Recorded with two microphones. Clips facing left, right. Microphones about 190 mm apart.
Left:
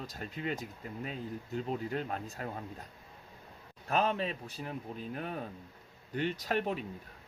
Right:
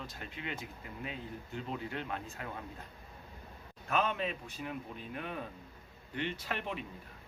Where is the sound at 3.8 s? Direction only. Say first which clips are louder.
Left 2 dB; 35° left (ahead or behind).